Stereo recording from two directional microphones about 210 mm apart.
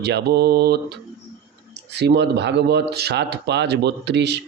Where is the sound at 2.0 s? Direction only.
50° right (ahead or behind).